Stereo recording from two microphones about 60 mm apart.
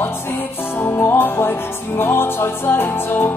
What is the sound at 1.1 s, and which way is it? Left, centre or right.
Music, left.